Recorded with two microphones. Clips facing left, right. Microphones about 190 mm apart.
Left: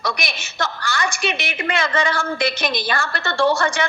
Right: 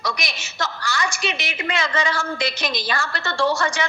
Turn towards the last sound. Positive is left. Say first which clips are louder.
# left 3 dB
turn(degrees=55)  # may be behind; listen again after turning